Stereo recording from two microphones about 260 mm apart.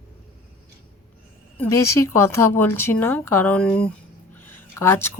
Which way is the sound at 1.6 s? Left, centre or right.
Centre.